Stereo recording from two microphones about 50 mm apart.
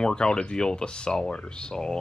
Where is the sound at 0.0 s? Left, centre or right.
Centre.